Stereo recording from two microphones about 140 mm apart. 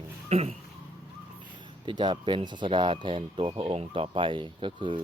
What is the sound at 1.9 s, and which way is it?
Speech, 35° right (ahead or behind).